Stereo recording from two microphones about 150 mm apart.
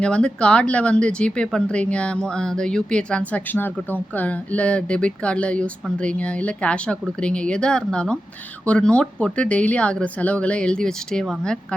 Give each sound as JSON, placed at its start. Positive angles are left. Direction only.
{"t": 0.0, "sound": "speech", "side_deg": 5}